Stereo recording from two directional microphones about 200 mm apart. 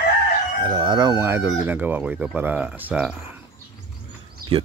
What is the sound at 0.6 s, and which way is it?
Speech, 25° right (ahead or behind).